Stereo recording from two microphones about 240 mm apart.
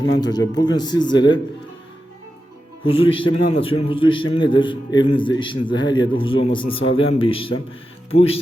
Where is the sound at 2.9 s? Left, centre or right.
Left.